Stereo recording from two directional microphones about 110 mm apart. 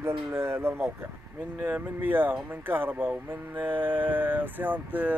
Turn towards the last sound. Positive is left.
turn(degrees=-15)  # may be behind; listen again after turning